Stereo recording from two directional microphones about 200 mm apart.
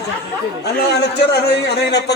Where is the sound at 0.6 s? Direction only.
55° left (ahead or behind).